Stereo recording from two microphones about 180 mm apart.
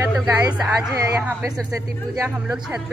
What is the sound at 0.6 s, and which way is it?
Speech, 15° right (ahead or behind).